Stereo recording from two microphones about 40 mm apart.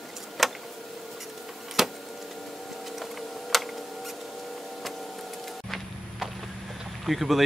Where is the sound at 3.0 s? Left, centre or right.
Centre.